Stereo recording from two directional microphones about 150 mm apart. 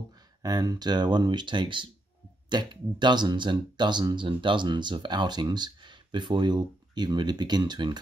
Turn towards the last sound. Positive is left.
turn(degrees=-30)  # may be behind; listen again after turning